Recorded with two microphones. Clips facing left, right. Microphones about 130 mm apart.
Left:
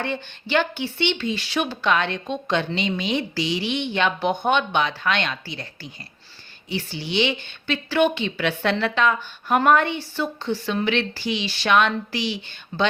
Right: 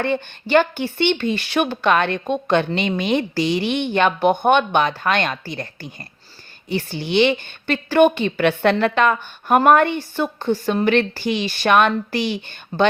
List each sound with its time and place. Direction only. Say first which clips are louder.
0.0 s speech: right 6 dB; 50° right (ahead or behind)